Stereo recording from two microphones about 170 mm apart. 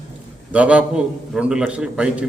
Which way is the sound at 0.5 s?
5° right (ahead or behind).